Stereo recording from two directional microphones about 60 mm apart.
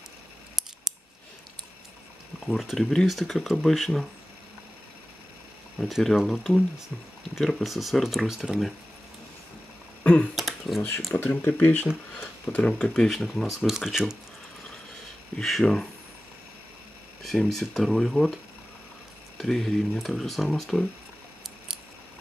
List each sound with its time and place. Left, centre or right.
2.4 s speech: centre
5.8 s speech: centre
10.0 s finger snapping: left
10.3 s computer keyboard: centre
11.2 s speech: left
12.5 s speech: centre
15.4 s speech: centre
17.2 s speech: centre